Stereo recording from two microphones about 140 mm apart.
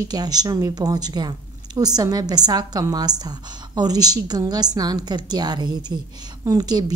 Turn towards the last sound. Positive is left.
turn(degrees=-30)  # may be behind; listen again after turning